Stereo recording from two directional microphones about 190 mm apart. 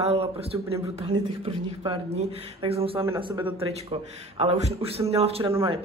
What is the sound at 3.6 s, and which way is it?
A man's voice, 30° right (ahead or behind).